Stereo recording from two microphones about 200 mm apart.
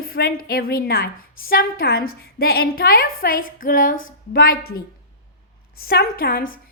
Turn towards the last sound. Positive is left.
turn(degrees=45)  # may be behind; listen again after turning